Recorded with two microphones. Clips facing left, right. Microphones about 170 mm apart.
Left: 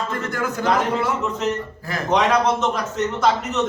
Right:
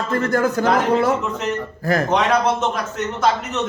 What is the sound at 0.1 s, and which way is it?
Speech, 40° right (ahead or behind).